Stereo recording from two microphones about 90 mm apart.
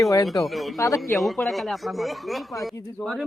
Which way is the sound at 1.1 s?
Centre (ahead or behind).